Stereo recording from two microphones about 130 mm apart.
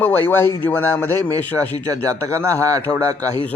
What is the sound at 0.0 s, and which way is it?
Speech, 15° left (ahead or behind).